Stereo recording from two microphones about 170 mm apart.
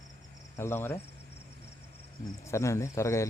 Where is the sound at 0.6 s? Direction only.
15° left (ahead or behind).